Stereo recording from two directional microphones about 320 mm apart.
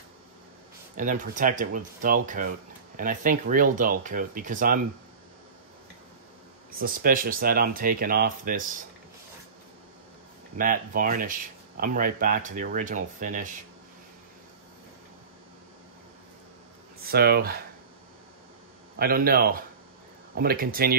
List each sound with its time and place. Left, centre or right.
0.9 s speech: right
6.7 s speech: right
10.6 s speech: right
17.0 s speech: right
18.9 s speech: right